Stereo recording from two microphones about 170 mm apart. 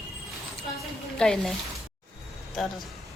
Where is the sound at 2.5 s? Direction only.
Centre (ahead or behind).